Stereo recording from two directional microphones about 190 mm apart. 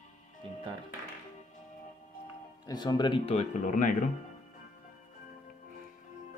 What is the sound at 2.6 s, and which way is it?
Speech, 20° left (ahead or behind).